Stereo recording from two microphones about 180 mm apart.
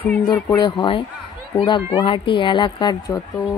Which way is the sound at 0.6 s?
25° left (ahead or behind).